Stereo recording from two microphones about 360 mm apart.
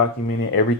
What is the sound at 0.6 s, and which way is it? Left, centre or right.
Speech, left.